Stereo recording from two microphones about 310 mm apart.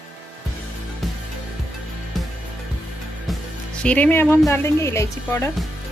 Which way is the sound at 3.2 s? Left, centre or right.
Centre.